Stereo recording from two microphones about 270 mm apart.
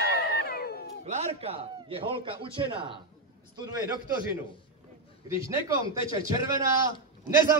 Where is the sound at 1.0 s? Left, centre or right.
Right.